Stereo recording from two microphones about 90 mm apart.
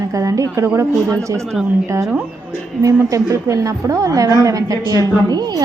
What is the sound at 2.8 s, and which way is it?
A woman's voice, 40° right (ahead or behind).